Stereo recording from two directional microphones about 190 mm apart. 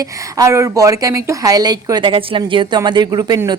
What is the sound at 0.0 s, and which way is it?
Speech, 15° right (ahead or behind).